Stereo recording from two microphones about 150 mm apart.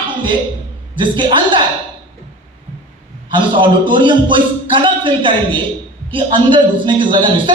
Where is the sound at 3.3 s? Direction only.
30° right (ahead or behind).